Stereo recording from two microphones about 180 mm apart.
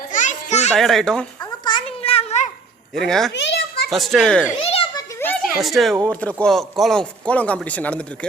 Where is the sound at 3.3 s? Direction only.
75° left (ahead or behind).